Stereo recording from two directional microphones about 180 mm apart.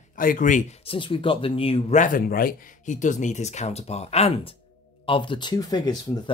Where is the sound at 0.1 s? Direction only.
50° left (ahead or behind).